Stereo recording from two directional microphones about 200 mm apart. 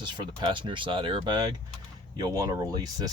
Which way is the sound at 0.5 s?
25° right (ahead or behind).